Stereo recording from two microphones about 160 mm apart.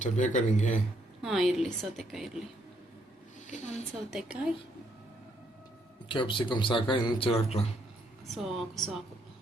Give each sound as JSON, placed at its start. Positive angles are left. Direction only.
{"t": 0.0, "sound": "speech", "side_deg": 50}
{"t": 1.2, "sound": "a woman's voice", "side_deg": 0}
{"t": 3.4, "sound": "speech", "side_deg": 50}
{"t": 4.1, "sound": "a woman's voice", "side_deg": -5}
{"t": 6.1, "sound": "speech", "side_deg": 30}
{"t": 8.3, "sound": "a woman's voice", "side_deg": 0}